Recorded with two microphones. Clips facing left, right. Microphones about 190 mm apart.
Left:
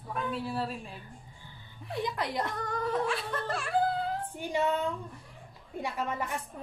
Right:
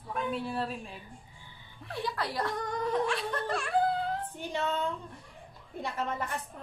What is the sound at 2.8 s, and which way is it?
Speech, 5° left (ahead or behind).